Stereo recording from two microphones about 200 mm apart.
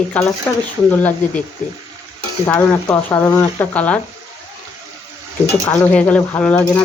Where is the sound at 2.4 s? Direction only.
10° left (ahead or behind).